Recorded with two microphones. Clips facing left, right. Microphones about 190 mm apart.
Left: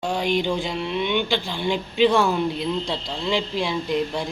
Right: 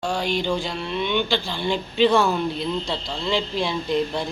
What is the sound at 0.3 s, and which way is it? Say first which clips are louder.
Speech: left 1 dB; 20° left (ahead or behind).